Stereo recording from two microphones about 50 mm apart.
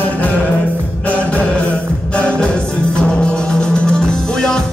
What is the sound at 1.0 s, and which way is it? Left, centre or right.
Music, left.